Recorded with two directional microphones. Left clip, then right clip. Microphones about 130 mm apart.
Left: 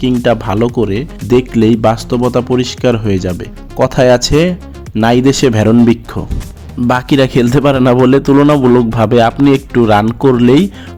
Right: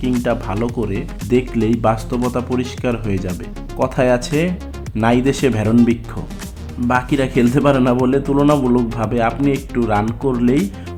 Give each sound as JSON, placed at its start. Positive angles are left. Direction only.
{"t": 0.0, "sound": "speech", "side_deg": 55}
{"t": 6.8, "sound": "a man's voice", "side_deg": 70}
{"t": 9.0, "sound": "a man's voice", "side_deg": 70}